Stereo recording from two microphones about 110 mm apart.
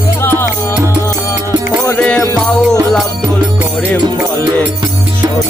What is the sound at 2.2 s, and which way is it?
Music, 25° left (ahead or behind).